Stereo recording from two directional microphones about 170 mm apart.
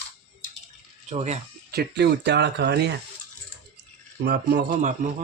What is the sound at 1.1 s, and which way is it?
Speech, 40° right (ahead or behind).